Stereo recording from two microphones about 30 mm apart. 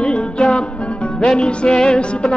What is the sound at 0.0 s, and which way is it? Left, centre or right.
Music, left.